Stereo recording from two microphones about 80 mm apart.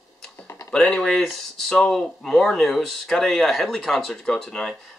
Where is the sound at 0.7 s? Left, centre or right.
Centre.